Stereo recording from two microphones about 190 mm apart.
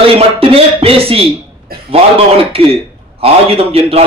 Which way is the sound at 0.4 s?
30° right (ahead or behind).